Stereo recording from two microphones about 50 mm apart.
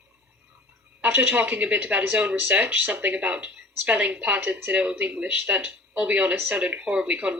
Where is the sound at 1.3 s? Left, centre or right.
Right.